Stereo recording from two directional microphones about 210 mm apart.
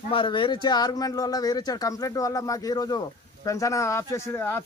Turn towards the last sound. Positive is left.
turn(degrees=10)  # may be behind; listen again after turning